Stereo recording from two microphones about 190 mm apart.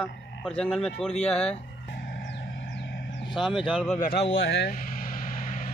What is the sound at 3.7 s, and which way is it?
Speech, 5° left (ahead or behind).